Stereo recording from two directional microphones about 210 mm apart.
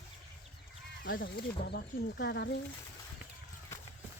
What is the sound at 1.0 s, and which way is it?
Speech, 45° left (ahead or behind).